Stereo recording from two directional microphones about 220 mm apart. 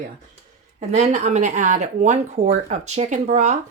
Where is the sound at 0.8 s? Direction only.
30° right (ahead or behind).